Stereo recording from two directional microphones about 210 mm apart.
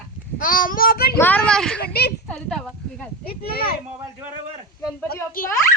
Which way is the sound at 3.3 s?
45° left (ahead or behind).